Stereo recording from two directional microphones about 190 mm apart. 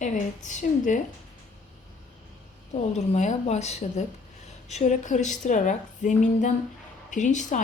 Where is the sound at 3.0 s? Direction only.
35° left (ahead or behind).